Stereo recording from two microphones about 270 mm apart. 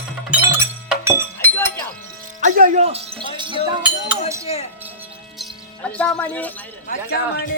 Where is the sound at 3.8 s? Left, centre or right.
Centre.